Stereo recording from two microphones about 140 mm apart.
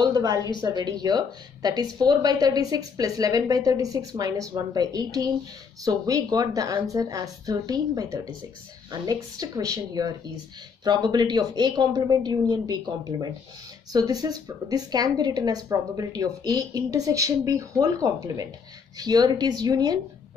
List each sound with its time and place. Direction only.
0.0 s a woman's voice: 25° right (ahead or behind)